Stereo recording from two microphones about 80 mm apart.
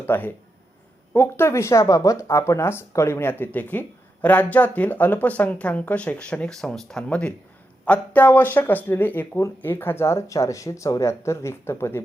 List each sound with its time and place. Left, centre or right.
0.0 s speech: left